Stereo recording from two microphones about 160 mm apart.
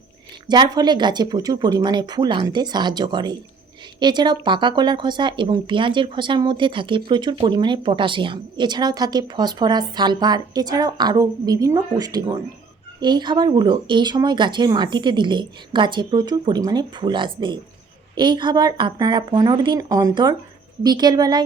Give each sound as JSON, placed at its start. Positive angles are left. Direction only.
{"t": 0.4, "sound": "a woman's voice", "side_deg": -25}